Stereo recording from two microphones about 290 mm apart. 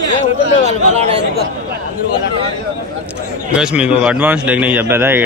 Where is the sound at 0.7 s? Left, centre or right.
Right.